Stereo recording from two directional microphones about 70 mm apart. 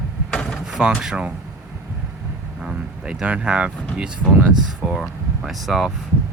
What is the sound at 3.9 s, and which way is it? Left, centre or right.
Speech, centre.